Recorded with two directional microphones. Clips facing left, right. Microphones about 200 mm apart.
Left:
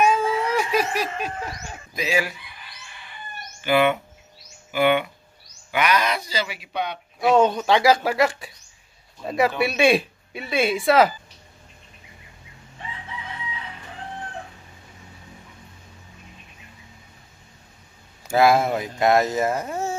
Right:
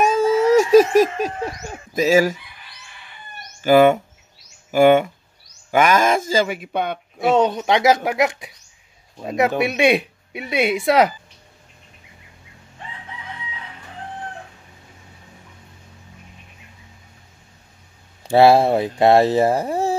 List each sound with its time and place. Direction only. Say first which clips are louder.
0.0 s cat: right 5 dB; 40° right (ahead or behind)
3.6 s speech: right 7 dB; 45° right (ahead or behind)
7.4 s speech: right 1 dB; 20° right (ahead or behind)
18.2 s speech: right 5 dB; 30° right (ahead or behind)